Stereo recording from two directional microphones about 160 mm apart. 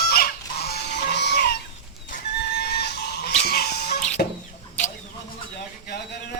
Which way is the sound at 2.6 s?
90° left.